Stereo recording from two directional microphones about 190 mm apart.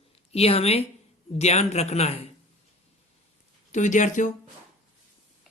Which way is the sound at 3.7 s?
40° left (ahead or behind).